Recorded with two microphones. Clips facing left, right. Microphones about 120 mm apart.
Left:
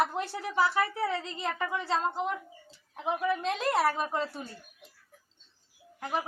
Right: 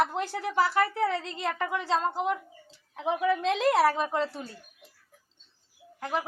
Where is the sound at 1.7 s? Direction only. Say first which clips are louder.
Right 3 dB; 85° right.